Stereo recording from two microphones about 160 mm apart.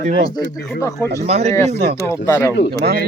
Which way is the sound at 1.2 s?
40° right (ahead or behind).